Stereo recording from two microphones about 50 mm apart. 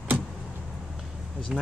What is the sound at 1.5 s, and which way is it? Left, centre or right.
Speech, centre.